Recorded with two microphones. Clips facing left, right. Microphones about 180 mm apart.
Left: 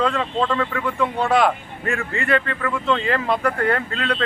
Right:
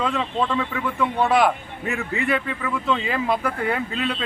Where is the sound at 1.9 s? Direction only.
5° right (ahead or behind).